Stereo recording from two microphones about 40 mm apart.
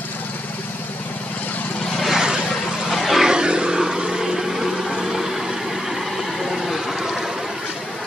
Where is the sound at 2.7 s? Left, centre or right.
Centre.